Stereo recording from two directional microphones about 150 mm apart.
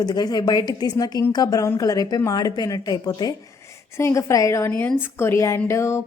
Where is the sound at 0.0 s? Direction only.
25° left (ahead or behind).